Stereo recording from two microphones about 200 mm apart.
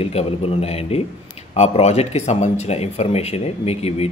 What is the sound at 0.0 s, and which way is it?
Speech, 30° left (ahead or behind).